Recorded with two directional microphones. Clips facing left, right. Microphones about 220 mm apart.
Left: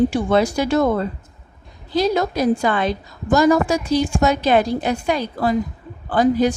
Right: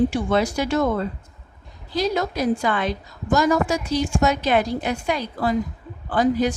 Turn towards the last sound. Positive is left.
turn(degrees=30)  # may be behind; listen again after turning